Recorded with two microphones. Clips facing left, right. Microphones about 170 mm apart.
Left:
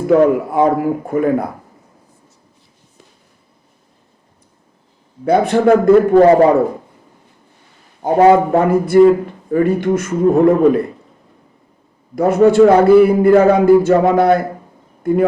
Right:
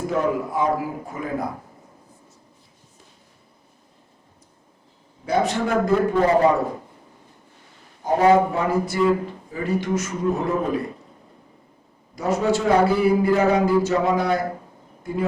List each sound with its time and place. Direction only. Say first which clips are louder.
0.1 s a man's voice: left 13 dB; 65° left (ahead or behind)
5.2 s a man's voice: left 9 dB; 55° left (ahead or behind)
8.0 s a man's voice: left 6 dB; 55° left (ahead or behind)
12.1 s a man's voice: left 11 dB; 55° left (ahead or behind)